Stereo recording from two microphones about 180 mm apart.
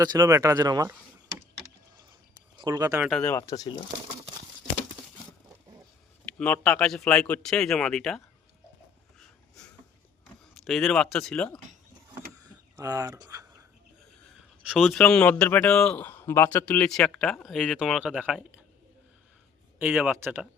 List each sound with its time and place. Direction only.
0.0 s speech: 20° right (ahead or behind)
2.6 s speech: 20° right (ahead or behind)
3.2 s speech: 15° left (ahead or behind)
6.4 s speech: 5° left (ahead or behind)
10.5 s speech: centre (ahead or behind)
12.4 s a sound: 20° right (ahead or behind)
14.7 s speech: centre (ahead or behind)
19.8 s speech: 10° right (ahead or behind)